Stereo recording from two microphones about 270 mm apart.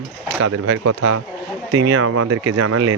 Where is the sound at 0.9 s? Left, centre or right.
Right.